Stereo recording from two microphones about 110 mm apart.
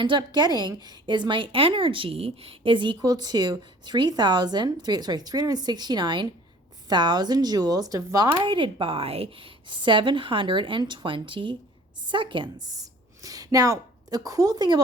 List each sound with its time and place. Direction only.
0.0 s speech: 45° right (ahead or behind)
8.4 s a woman's voice: 50° right (ahead or behind)